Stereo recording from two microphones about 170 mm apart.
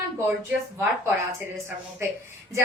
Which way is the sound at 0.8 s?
10° right (ahead or behind).